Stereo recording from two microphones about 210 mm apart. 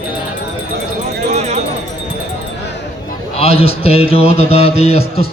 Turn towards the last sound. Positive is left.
turn(degrees=30)  # may be behind; listen again after turning